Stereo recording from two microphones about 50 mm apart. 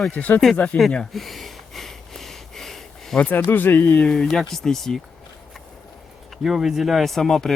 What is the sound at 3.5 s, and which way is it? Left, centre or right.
Speech, left.